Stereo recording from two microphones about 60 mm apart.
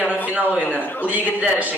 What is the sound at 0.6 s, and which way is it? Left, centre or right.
Speech, left.